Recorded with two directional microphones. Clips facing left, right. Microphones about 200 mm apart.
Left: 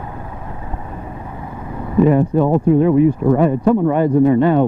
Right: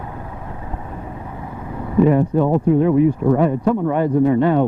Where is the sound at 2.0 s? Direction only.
20° left (ahead or behind).